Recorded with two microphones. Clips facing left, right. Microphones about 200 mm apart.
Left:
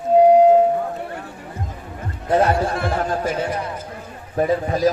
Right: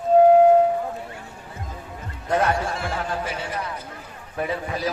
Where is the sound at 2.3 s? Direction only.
35° left (ahead or behind).